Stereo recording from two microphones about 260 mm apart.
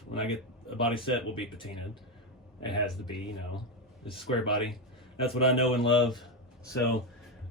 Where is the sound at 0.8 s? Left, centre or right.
Centre.